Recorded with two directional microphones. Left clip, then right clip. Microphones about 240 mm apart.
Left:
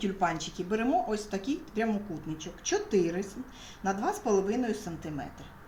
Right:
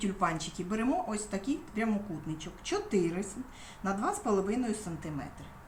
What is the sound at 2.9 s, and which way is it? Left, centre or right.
Speech, centre.